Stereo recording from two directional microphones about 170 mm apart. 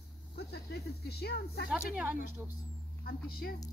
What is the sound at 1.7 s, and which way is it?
Speech, 10° right (ahead or behind).